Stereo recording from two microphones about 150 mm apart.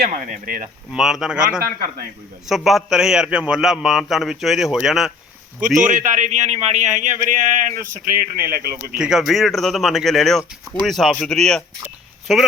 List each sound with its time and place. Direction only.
0.0 s a man's voice: 65° right (ahead or behind)
0.9 s a man's voice: 5° right (ahead or behind)
5.5 s a man's voice: 60° right (ahead or behind); by 9.0 s 85° right
9.0 s a man's voice: 5° right (ahead or behind)